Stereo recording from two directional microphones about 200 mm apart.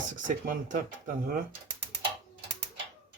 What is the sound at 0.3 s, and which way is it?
Speech, 40° right (ahead or behind).